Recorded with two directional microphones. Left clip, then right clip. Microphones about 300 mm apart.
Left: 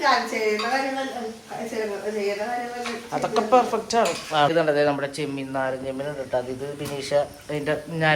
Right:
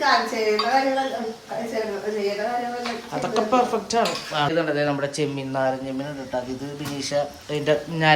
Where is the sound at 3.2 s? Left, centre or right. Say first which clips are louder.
Left 1 dB; centre.